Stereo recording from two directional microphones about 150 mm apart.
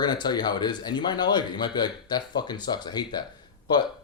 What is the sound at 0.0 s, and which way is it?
Speech, 30° left (ahead or behind).